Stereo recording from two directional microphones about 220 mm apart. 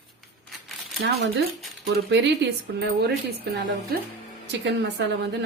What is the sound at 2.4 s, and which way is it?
A woman's voice, 50° right (ahead or behind).